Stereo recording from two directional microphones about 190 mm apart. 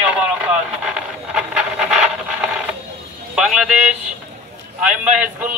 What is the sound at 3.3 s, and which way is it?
Speech, centre (ahead or behind).